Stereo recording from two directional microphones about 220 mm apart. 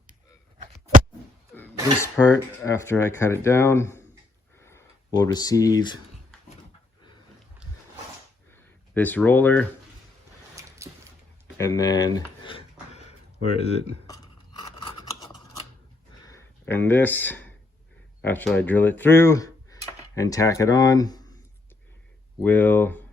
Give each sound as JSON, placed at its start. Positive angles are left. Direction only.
{"t": 0.6, "sound": "a sound", "side_deg": -35}
{"t": 1.5, "sound": "cough", "side_deg": 10}
{"t": 2.6, "sound": "speech", "side_deg": 10}
{"t": 8.6, "sound": "speech", "side_deg": 10}
{"t": 10.5, "sound": "a sound", "side_deg": -15}
{"t": 11.5, "sound": "speech", "side_deg": 15}
{"t": 12.9, "sound": "a sound", "side_deg": 30}
{"t": 13.6, "sound": "speech", "side_deg": 30}
{"t": 14.1, "sound": "scissors", "side_deg": 20}
{"t": 16.2, "sound": "a sound", "side_deg": 10}
{"t": 18.2, "sound": "speech", "side_deg": 10}
{"t": 22.4, "sound": "speech", "side_deg": 10}